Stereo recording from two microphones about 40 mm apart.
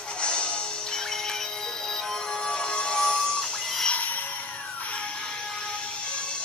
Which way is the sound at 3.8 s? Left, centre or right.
Left.